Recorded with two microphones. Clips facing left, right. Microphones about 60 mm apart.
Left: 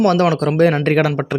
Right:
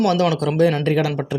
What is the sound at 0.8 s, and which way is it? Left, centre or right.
Speech, left.